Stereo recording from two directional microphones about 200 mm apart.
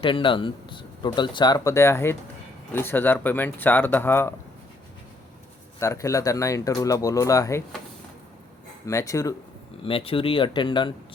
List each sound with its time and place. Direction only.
0.0 s speech: 25° left (ahead or behind)
5.8 s speech: 15° left (ahead or behind)
8.9 s speech: 15° left (ahead or behind)
9.8 s speech: 25° left (ahead or behind)